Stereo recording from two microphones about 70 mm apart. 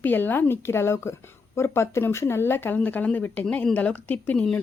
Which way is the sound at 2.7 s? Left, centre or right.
Left.